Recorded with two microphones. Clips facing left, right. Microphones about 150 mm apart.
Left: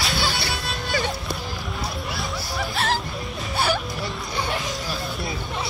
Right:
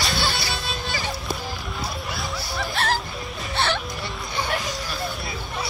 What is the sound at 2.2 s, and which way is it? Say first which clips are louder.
Music: left 1 dB; centre (ahead or behind).